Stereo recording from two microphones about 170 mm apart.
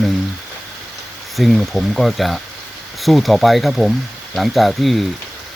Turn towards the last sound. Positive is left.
turn(degrees=0)  # may be behind; listen again after turning